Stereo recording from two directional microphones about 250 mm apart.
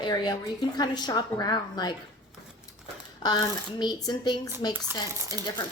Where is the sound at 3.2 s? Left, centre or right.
Centre.